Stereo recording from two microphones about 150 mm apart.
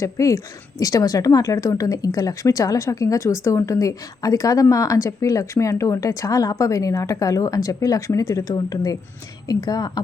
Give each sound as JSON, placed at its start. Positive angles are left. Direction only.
{"t": 0.0, "sound": "a woman's voice", "side_deg": 20}